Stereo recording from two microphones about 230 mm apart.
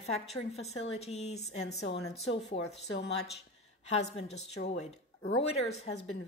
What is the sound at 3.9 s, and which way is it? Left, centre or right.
Speech, left.